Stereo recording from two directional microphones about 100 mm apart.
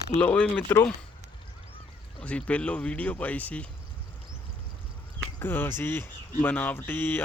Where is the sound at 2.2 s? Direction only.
15° left (ahead or behind).